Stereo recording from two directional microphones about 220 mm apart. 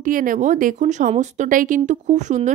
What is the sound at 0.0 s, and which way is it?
A woman's voice, 40° right (ahead or behind).